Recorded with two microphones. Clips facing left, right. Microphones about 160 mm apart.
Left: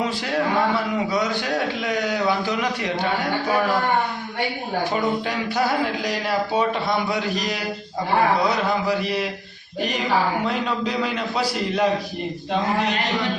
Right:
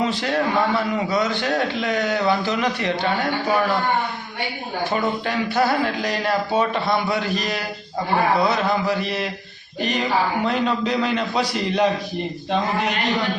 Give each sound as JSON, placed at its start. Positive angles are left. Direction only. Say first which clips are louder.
{"t": 1.1, "sound": "a man's voice", "louder": "right 2 dB", "side_deg": 10}
{"t": 5.5, "sound": "a man's voice", "louder": "right 2 dB", "side_deg": 15}
{"t": 10.4, "sound": "a man's voice", "louder": "right 3 dB", "side_deg": 10}